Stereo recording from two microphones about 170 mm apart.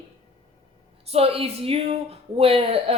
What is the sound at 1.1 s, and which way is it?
Speech, 35° right (ahead or behind).